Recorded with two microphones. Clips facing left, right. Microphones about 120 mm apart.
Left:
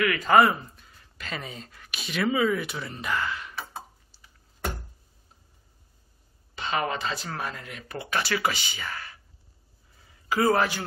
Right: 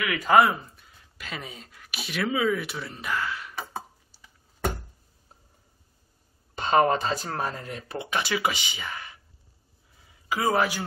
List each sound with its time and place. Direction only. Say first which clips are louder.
0.0 s speech: even; 5° right (ahead or behind)
6.5 s speech: right 7 dB; 45° right (ahead or behind)
8.0 s speech: even; 15° right (ahead or behind)
9.9 s a sound: left 4 dB; 5° right (ahead or behind)